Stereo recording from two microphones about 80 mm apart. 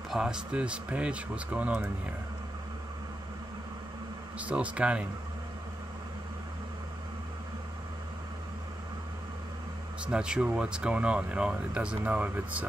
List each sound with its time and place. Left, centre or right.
0.2 s speech: centre
4.4 s speech: centre
10.0 s speech: centre